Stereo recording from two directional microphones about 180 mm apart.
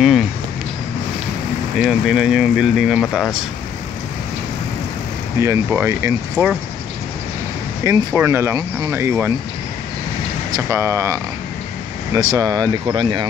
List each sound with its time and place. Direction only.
1.8 s speech: 5° right (ahead or behind)
5.4 s speech: 15° right (ahead or behind)
7.8 s speech: 15° right (ahead or behind)
10.5 s speech: 15° right (ahead or behind)